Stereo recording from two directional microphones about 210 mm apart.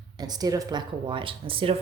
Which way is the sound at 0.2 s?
20° right (ahead or behind).